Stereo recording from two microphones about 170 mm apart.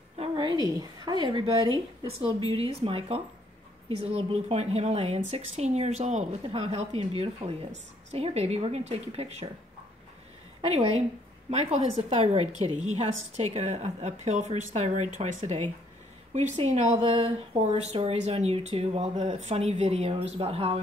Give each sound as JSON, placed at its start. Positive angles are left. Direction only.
{"t": 0.2, "sound": "a sound", "side_deg": -30}
{"t": 0.7, "sound": "speech", "side_deg": -25}
{"t": 10.6, "sound": "speech", "side_deg": -35}